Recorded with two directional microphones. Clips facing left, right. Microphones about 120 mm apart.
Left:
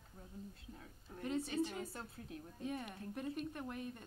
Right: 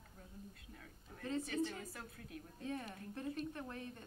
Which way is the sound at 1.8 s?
30° left (ahead or behind).